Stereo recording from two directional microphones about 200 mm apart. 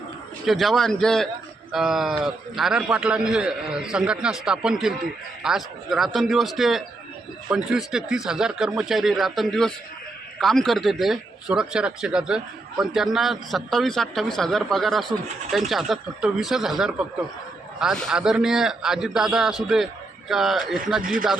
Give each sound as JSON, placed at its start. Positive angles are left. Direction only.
{"t": 0.4, "sound": "speech", "side_deg": 0}
{"t": 21.0, "sound": "a man's voice", "side_deg": -45}